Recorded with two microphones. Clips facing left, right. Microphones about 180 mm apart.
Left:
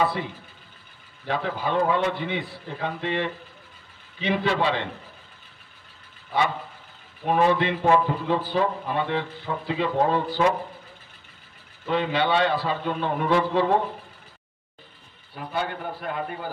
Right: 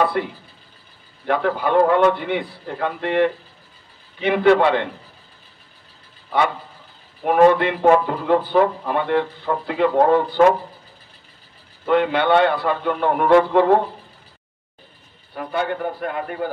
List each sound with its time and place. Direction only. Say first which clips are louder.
1.2 s a man's voice: right 7 dB; 60° right (ahead or behind)
7.2 s a man's voice: right 7 dB; 60° right (ahead or behind)
11.8 s a man's voice: right 6 dB; 60° right (ahead or behind)
15.3 s a man's voice: right 6 dB; 60° right (ahead or behind)